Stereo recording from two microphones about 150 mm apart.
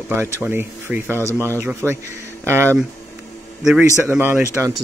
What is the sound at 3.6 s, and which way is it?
Speech, 5° right (ahead or behind).